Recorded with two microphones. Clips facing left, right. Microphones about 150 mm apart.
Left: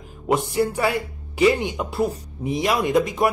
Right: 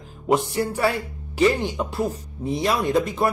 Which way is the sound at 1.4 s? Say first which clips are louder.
Left 1 dB; 10° left (ahead or behind).